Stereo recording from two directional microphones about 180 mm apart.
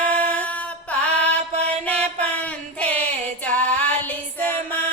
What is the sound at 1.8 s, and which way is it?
Music, 10° left (ahead or behind).